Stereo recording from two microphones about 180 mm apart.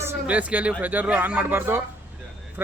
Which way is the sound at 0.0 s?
10° right (ahead or behind).